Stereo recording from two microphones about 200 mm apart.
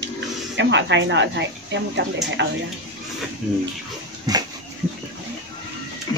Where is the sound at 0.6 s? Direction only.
60° right (ahead or behind).